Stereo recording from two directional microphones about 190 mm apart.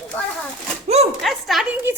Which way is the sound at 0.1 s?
5° left (ahead or behind).